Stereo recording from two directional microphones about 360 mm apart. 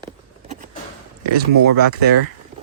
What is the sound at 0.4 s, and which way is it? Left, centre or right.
Vehicle, centre.